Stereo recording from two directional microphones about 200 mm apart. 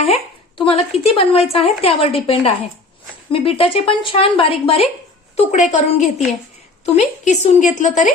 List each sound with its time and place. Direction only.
0.0 s a woman's voice: 30° left (ahead or behind)